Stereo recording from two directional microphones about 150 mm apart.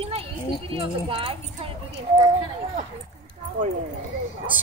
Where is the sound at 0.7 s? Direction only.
40° right (ahead or behind).